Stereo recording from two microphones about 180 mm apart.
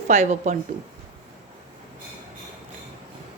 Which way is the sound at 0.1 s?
40° right (ahead or behind).